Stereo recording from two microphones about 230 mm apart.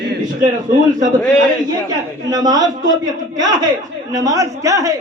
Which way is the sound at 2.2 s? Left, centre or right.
Centre.